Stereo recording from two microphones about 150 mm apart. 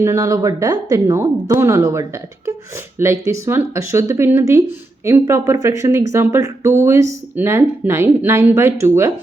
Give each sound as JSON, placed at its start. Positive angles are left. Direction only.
{"t": 0.0, "sound": "a woman's voice", "side_deg": -20}